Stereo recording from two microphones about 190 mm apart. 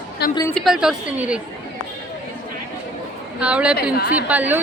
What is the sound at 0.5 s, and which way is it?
Speech, centre (ahead or behind).